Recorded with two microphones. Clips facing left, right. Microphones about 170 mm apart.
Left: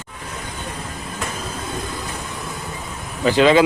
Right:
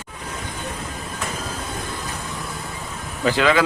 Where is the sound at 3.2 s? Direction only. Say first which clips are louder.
Left 4 dB; 25° left (ahead or behind).